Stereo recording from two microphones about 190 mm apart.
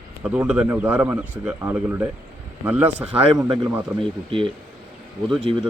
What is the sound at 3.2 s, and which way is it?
Speech, 25° right (ahead or behind).